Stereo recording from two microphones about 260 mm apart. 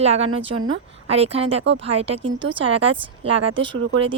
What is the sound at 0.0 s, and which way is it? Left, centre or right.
Speech, right.